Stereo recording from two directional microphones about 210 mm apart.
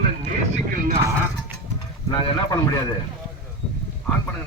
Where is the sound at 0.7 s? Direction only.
40° right (ahead or behind).